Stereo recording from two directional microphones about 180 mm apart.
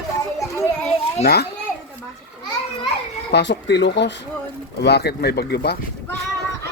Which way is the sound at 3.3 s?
70° left (ahead or behind).